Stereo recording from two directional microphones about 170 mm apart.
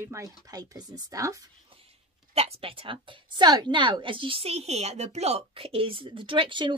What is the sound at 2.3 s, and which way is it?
A woman's voice, 35° right (ahead or behind).